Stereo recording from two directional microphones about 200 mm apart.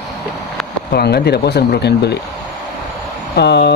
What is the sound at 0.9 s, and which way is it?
Speech, 55° left (ahead or behind).